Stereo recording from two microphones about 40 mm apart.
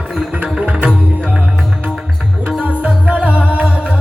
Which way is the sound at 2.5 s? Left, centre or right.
Right.